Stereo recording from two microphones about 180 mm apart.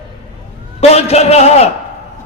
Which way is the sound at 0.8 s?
35° left (ahead or behind).